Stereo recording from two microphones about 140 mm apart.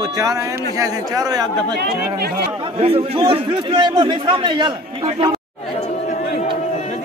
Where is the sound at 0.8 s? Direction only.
25° right (ahead or behind).